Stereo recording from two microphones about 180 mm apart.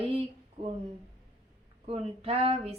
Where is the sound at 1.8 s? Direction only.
35° right (ahead or behind).